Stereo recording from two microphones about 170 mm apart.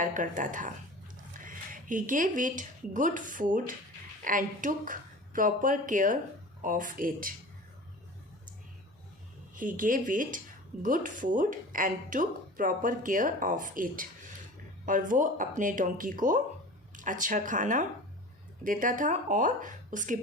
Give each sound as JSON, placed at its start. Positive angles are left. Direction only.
{"t": 0.0, "sound": "speech", "side_deg": -50}
{"t": 9.6, "sound": "speech", "side_deg": -50}